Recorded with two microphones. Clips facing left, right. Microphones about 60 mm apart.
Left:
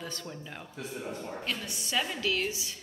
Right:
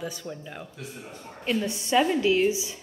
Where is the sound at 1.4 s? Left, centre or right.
Right.